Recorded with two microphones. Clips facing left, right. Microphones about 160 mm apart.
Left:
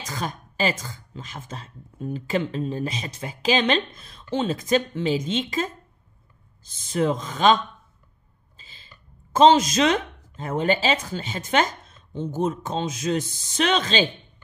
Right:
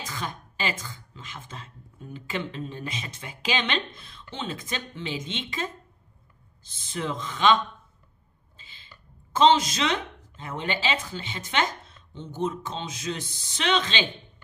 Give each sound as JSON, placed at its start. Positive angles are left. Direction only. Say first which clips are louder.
{"t": 0.0, "sound": "speech", "louder": "left 4 dB", "side_deg": 40}